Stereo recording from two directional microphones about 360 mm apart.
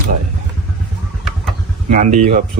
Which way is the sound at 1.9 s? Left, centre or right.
Centre.